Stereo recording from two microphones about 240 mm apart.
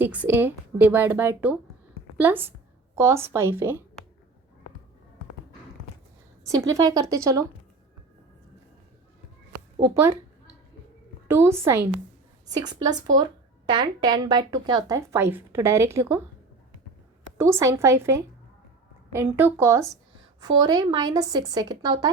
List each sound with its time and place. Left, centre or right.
0.0 s a woman's voice: centre
6.4 s a sound: centre
6.7 s speech: centre
9.8 s speech: centre
11.3 s speech: centre
17.3 s speech: centre